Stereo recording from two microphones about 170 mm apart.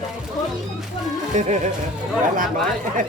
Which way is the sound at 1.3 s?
45° right (ahead or behind).